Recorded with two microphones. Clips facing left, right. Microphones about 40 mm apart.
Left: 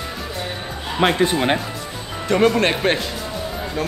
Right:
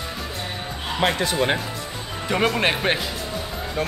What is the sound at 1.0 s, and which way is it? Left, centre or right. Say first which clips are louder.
Speech: left 5 dB; centre.